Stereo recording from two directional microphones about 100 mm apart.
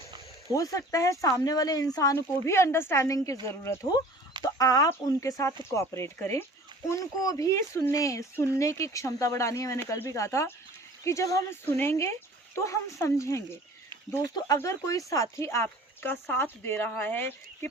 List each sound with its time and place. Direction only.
0.5 s speech: 35° left (ahead or behind)
4.5 s speech: 35° left (ahead or behind)
11.6 s speech: 20° left (ahead or behind)